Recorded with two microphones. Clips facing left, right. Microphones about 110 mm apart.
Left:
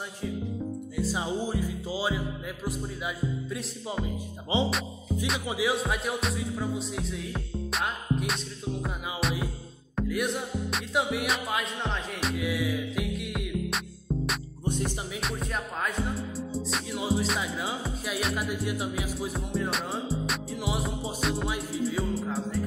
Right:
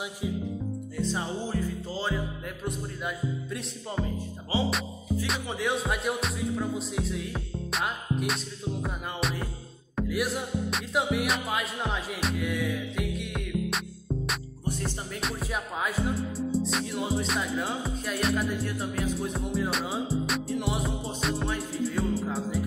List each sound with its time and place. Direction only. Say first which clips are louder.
0.9 s music: left 1 dB; 10° left (ahead or behind)
4.5 s speech: left 1 dB; 20° left (ahead or behind)
5.2 s music: left 3 dB; 5° left (ahead or behind)
14.7 s music: left 2 dB; 15° left (ahead or behind)
15.1 s music: right 2 dB; centre (ahead or behind)